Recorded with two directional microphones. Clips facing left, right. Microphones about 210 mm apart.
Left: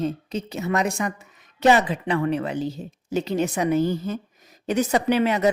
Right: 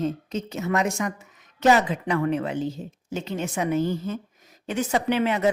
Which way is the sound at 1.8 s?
35° left (ahead or behind).